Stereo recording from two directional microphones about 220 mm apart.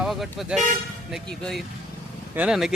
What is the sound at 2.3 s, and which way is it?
Speech, 5° right (ahead or behind).